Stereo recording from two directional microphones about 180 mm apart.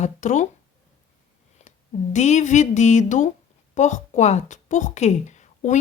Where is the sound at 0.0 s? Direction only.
40° left (ahead or behind).